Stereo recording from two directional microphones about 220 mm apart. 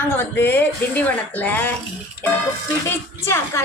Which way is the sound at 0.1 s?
10° left (ahead or behind).